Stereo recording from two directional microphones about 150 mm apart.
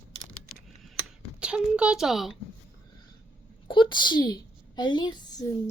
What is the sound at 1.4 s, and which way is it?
Speech, 5° right (ahead or behind).